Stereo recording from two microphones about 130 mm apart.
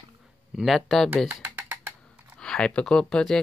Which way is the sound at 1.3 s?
15° right (ahead or behind).